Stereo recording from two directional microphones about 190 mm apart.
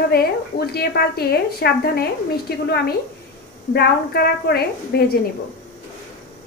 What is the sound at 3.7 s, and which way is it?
A woman's voice, 55° left (ahead or behind).